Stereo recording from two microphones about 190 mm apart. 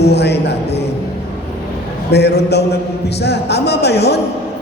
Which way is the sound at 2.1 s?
60° left (ahead or behind).